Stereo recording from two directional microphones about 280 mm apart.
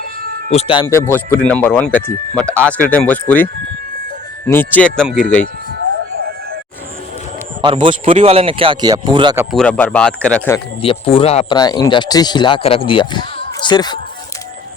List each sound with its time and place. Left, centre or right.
0.5 s speech: centre
7.6 s speech: centre
9.6 s speech: centre
10.8 s speech: centre